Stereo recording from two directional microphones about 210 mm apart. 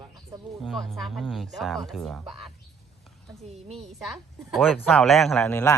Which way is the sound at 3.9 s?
Centre (ahead or behind).